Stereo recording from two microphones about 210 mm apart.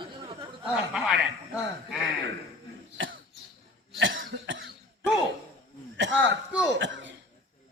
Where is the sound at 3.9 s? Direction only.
65° right (ahead or behind).